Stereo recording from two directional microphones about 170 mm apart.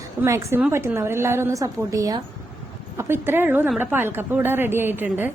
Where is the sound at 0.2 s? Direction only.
15° right (ahead or behind).